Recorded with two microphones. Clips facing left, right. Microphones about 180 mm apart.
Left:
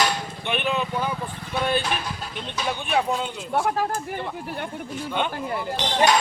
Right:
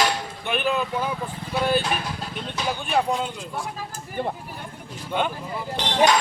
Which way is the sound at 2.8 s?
Centre (ahead or behind).